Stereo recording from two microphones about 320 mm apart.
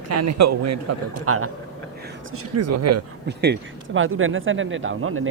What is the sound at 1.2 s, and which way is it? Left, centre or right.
Speech, right.